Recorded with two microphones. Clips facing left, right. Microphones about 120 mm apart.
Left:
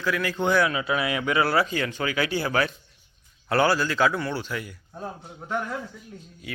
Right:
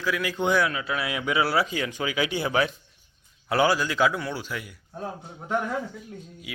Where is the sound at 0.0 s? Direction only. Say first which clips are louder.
Left 1 dB; 5° right (ahead or behind).